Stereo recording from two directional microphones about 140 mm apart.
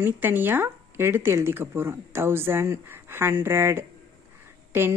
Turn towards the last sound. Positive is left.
turn(degrees=-15)  # may be behind; listen again after turning